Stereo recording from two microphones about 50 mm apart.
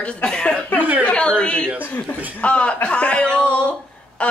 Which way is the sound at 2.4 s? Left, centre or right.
Left.